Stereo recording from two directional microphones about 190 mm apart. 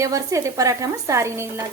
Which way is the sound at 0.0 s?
15° right (ahead or behind).